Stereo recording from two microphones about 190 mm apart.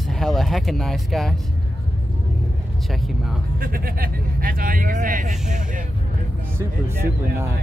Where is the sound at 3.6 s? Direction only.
50° right (ahead or behind).